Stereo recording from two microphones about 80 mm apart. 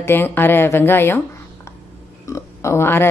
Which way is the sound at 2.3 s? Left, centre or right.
Left.